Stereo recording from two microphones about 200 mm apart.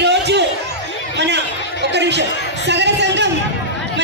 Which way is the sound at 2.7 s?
60° right (ahead or behind).